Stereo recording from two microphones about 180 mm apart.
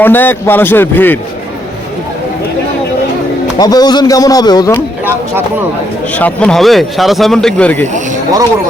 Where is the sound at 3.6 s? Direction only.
20° left (ahead or behind).